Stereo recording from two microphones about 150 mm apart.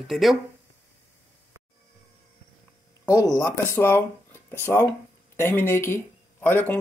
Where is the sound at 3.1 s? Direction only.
25° left (ahead or behind).